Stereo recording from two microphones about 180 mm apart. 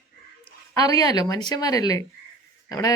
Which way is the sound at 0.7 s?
20° left (ahead or behind).